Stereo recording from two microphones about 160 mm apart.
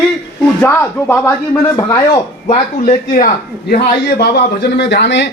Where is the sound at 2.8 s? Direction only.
50° left (ahead or behind).